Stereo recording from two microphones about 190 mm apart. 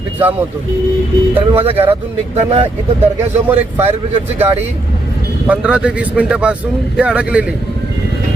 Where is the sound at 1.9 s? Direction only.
35° right (ahead or behind).